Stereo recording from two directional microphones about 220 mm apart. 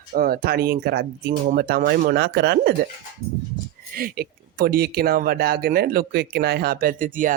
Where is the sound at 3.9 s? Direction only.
40° right (ahead or behind).